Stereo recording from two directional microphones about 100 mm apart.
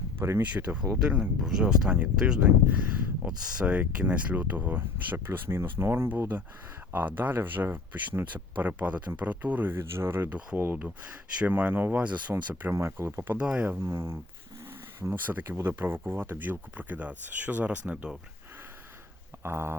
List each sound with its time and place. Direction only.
0.2 s speech: 25° right (ahead or behind)
0.4 s speech: 15° right (ahead or behind)
12.7 s speech: 25° right (ahead or behind)
13.3 s speech: 10° right (ahead or behind)
13.7 s speech: 25° right (ahead or behind); by 18.2 s 10° right (ahead or behind)
19.4 s speech: 25° right (ahead or behind)